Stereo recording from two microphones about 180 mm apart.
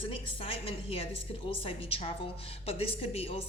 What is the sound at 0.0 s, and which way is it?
A woman's voice, 30° left (ahead or behind).